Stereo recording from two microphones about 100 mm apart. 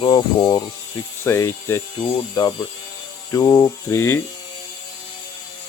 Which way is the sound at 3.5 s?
25° left (ahead or behind).